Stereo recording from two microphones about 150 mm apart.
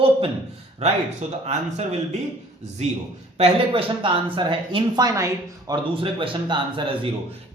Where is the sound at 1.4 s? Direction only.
45° right (ahead or behind).